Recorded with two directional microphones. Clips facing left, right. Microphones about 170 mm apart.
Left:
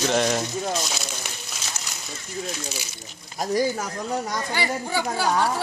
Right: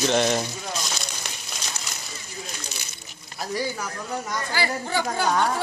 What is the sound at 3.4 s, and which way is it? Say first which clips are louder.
Speech: left 5 dB; 45° left (ahead or behind).